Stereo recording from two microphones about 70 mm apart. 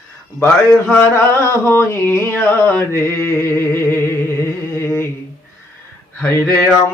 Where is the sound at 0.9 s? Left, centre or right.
Left.